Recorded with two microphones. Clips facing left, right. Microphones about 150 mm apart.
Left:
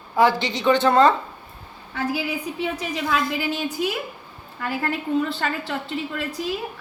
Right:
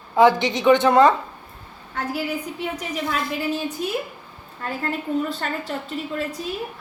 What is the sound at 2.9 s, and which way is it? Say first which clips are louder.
A woman's voice: left 2 dB; 90° left.